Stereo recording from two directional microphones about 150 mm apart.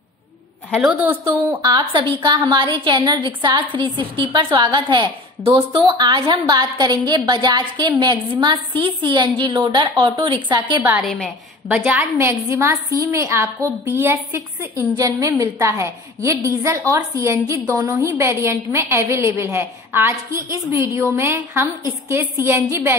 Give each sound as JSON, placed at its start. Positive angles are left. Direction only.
{"t": 0.7, "sound": "a woman's voice", "side_deg": 0}
{"t": 1.0, "sound": "a woman's voice", "side_deg": -15}
{"t": 1.6, "sound": "a woman's voice", "side_deg": -30}
{"t": 10.8, "sound": "a woman's voice", "side_deg": -10}